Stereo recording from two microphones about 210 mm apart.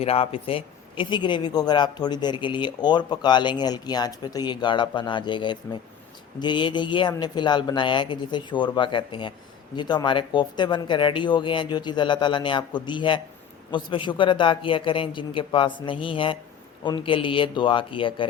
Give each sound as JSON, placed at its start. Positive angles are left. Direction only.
{"t": 0.0, "sound": "speech", "side_deg": 30}